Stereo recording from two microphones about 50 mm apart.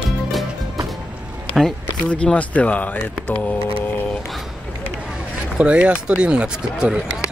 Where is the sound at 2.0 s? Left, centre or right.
Left.